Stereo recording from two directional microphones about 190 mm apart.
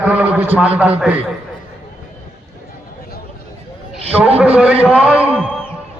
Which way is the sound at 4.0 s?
30° right (ahead or behind).